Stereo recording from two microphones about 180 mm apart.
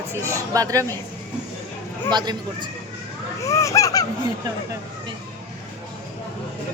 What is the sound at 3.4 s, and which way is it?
Speech, 15° left (ahead or behind).